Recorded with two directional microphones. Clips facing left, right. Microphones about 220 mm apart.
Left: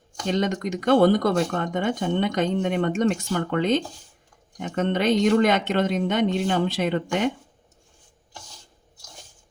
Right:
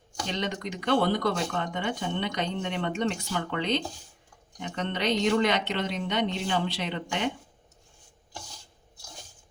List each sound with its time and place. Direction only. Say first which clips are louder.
0.3 s speech: left 8 dB; 45° left (ahead or behind)